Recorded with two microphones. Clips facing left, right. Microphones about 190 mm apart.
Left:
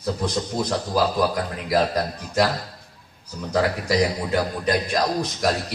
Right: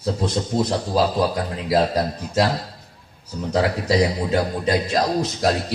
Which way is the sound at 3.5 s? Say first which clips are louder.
Right 2 dB; 25° right (ahead or behind).